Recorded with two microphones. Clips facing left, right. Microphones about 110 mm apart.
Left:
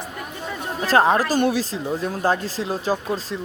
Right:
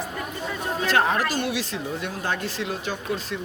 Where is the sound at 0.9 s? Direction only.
35° left (ahead or behind).